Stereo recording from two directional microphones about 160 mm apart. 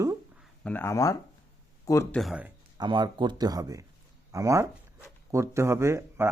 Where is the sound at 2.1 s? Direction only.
5° left (ahead or behind).